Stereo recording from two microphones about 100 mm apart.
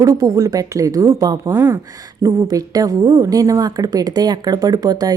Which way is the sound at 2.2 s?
35° right (ahead or behind).